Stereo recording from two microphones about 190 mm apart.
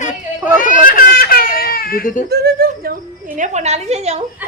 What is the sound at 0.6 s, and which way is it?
Crying, 45° left (ahead or behind).